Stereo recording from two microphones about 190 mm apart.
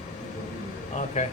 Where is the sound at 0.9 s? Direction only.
40° left (ahead or behind).